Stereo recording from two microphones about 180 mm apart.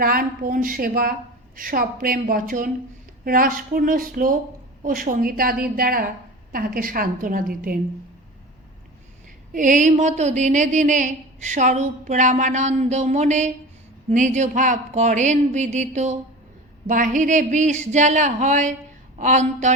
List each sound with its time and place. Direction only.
0.0 s a woman's voice: 55° right (ahead or behind)
9.5 s a woman's voice: 45° right (ahead or behind)